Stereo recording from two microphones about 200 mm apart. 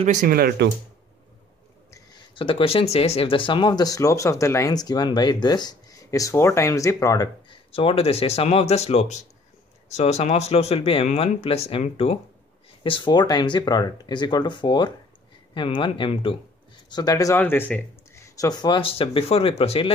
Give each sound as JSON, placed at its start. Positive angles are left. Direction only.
{"t": 0.0, "sound": "speech", "side_deg": -40}
{"t": 1.9, "sound": "speech", "side_deg": 20}